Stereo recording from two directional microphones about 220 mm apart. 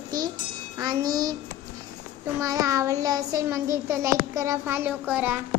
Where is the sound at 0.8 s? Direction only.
15° right (ahead or behind).